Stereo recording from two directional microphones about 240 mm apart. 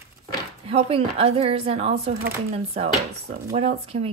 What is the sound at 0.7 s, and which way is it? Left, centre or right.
Speech, right.